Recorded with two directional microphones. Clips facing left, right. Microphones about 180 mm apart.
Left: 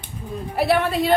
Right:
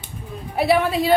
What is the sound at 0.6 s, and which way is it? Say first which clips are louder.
Speech: right 1 dB; centre (ahead or behind).